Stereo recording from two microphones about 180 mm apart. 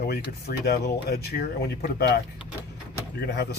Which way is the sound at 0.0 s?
60° left (ahead or behind).